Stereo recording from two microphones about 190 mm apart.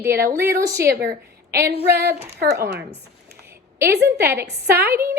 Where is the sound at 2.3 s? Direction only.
55° right (ahead or behind).